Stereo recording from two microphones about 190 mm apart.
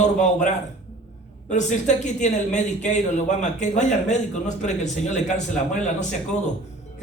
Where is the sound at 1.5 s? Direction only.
40° left (ahead or behind).